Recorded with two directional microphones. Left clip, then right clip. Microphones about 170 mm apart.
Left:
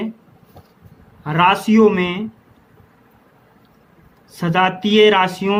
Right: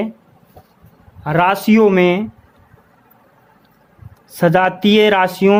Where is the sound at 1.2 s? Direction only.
45° right (ahead or behind).